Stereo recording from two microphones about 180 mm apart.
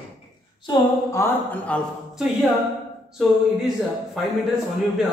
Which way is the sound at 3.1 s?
Centre (ahead or behind).